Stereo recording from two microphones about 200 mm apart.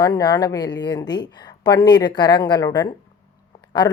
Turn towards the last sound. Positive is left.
turn(degrees=15)  # may be behind; listen again after turning